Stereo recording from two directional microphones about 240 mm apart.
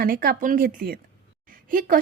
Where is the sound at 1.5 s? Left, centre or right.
Right.